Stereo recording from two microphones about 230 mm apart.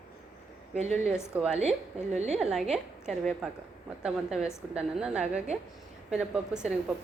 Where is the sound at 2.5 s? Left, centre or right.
Centre.